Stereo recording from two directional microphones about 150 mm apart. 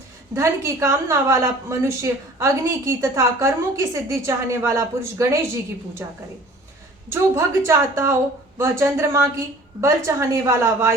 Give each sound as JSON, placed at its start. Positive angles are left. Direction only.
{"t": 0.3, "sound": "a woman's voice", "side_deg": -20}